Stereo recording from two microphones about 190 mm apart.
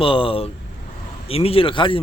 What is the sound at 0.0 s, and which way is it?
Speech, 30° left (ahead or behind).